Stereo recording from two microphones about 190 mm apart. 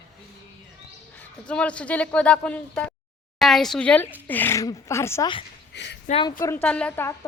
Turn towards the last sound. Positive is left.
turn(degrees=10)  # may be behind; listen again after turning